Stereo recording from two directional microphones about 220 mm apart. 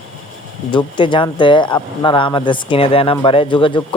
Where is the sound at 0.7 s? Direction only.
20° left (ahead or behind).